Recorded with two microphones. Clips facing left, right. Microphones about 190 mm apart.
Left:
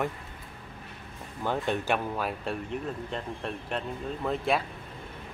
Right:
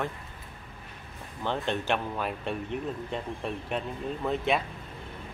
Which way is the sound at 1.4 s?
10° left (ahead or behind).